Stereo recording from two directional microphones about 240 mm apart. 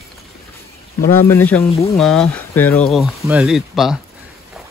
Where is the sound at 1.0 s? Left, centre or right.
Left.